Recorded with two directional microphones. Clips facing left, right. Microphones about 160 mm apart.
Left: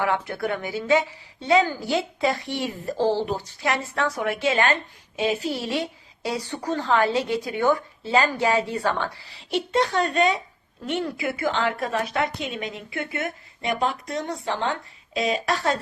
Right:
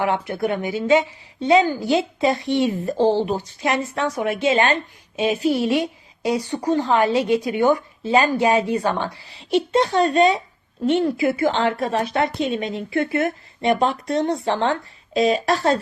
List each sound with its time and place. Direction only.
0.0 s a woman's voice: 20° right (ahead or behind); by 15.8 s 35° right (ahead or behind)